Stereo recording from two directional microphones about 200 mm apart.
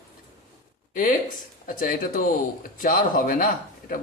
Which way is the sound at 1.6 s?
40° left (ahead or behind).